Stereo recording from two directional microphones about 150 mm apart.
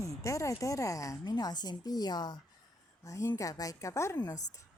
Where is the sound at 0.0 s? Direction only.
20° left (ahead or behind).